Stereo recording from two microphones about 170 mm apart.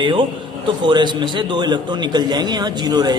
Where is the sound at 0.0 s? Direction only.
30° right (ahead or behind).